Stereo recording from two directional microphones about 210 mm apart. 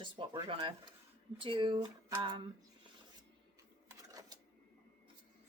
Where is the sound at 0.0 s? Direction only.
25° right (ahead or behind).